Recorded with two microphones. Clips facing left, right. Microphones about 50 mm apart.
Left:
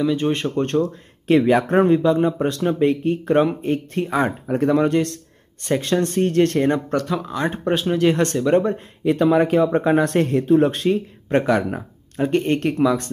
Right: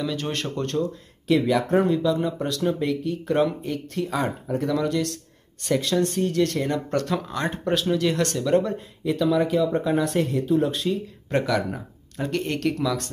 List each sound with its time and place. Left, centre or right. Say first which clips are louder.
0.0 s speech: left 8 dB; left
0.7 s speech: left 5 dB; left
6.9 s speech: left 3 dB; centre
7.4 s speech: left 4 dB; left
9.0 s speech: left 5 dB; left
11.2 s speech: left 5 dB; left